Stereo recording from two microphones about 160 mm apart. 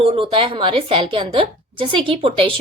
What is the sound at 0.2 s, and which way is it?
A woman's voice, 30° right (ahead or behind).